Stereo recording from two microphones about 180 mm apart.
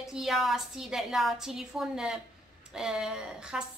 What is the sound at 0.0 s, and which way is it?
A woman's voice, centre (ahead or behind).